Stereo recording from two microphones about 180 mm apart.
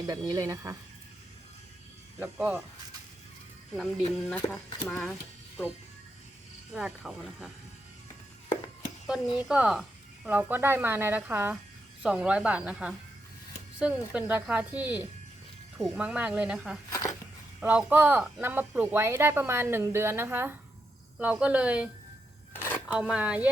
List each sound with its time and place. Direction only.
0.1 s speech: 20° right (ahead or behind)
2.1 s speech: 10° right (ahead or behind)
3.8 s speech: 5° left (ahead or behind)
6.7 s speech: 5° right (ahead or behind)
9.0 s speech: 5° right (ahead or behind)
22.5 s a sound: 10° left (ahead or behind)
22.9 s speech: 5° right (ahead or behind)